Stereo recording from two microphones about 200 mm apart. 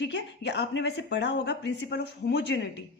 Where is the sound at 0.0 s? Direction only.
60° left (ahead or behind).